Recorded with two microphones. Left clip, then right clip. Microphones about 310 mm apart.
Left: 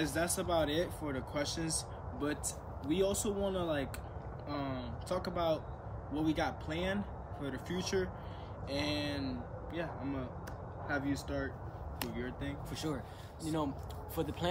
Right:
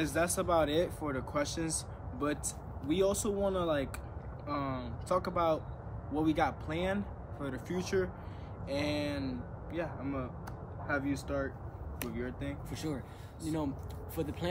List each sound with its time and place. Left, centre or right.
0.0 s speech: centre
12.7 s speech: centre